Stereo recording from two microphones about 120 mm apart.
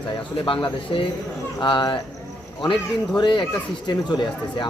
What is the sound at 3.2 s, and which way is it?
Speech, 40° left (ahead or behind).